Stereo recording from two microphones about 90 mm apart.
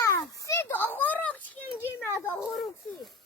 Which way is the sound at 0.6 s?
25° left (ahead or behind).